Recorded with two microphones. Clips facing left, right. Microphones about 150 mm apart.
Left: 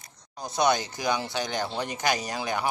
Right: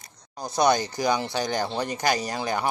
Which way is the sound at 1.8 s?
5° left (ahead or behind).